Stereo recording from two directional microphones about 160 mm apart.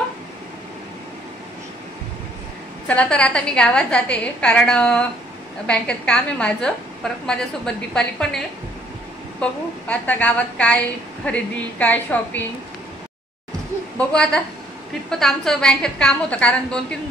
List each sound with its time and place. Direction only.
2.9 s a woman's voice: 5° left (ahead or behind)
9.4 s a woman's voice: 10° left (ahead or behind)
13.9 s a woman's voice: 5° left (ahead or behind)